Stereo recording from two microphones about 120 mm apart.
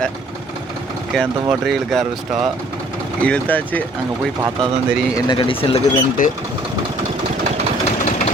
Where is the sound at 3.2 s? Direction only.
10° left (ahead or behind).